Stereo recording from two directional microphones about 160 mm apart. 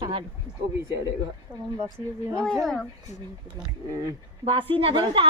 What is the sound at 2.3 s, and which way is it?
Speech, 5° left (ahead or behind).